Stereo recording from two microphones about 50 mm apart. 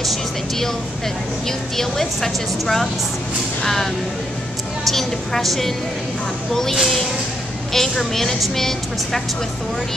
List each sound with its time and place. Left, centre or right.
0.0 s a woman's voice: centre
1.8 s a woman's voice: centre